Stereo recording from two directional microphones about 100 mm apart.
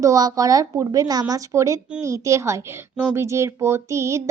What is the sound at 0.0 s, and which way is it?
A child's voice, 35° right (ahead or behind).